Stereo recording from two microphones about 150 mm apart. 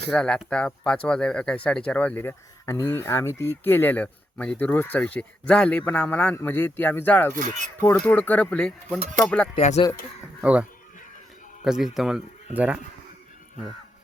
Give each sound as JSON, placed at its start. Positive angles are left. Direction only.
{"t": 0.1, "sound": "speech", "side_deg": 5}
{"t": 9.6, "sound": "speech", "side_deg": 45}
{"t": 10.4, "sound": "a man's voice", "side_deg": -10}